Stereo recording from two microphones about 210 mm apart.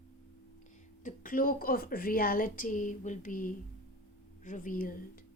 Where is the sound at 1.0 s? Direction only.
40° left (ahead or behind).